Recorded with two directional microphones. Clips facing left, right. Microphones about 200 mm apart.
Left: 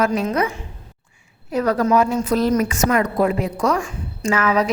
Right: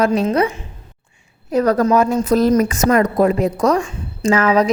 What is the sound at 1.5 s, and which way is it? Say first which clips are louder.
A woman's voice: right 3 dB; 40° right (ahead or behind).